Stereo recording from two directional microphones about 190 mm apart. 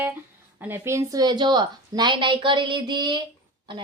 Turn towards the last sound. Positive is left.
turn(degrees=-25)  # may be behind; listen again after turning